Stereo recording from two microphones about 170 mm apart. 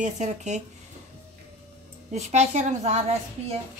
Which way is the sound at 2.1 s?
40° right (ahead or behind).